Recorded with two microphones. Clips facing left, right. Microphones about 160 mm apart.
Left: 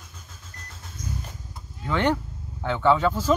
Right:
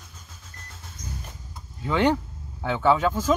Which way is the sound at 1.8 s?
10° right (ahead or behind).